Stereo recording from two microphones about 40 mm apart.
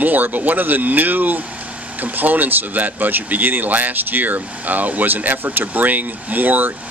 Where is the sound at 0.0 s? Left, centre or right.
Right.